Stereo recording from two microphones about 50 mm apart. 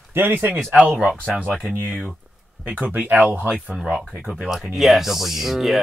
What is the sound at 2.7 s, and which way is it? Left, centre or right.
Speech, right.